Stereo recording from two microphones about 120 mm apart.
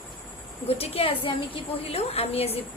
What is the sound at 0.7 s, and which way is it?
Speech, 55° left (ahead or behind).